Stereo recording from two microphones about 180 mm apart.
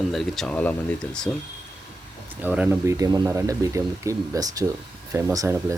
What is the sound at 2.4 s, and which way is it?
Speech, 10° right (ahead or behind).